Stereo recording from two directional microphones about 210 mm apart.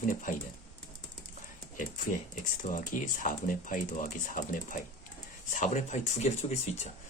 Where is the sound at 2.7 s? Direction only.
40° left (ahead or behind).